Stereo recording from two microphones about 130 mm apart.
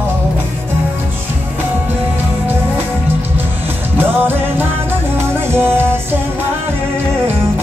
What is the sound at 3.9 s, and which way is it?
Music, 15° right (ahead or behind).